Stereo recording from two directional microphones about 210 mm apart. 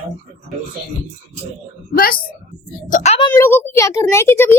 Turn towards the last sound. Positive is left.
turn(degrees=10)  # may be behind; listen again after turning